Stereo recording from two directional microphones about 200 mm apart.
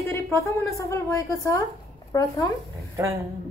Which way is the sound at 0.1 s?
15° left (ahead or behind).